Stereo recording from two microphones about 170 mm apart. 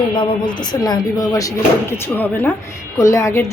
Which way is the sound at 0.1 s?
30° left (ahead or behind).